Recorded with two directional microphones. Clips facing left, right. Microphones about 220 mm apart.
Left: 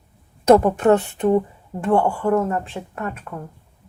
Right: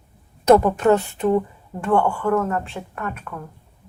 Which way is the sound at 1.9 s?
30° left (ahead or behind).